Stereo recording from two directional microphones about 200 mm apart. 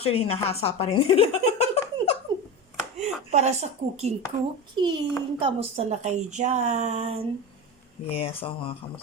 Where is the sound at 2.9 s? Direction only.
35° right (ahead or behind).